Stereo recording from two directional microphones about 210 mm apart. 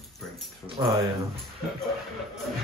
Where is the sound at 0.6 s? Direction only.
25° right (ahead or behind).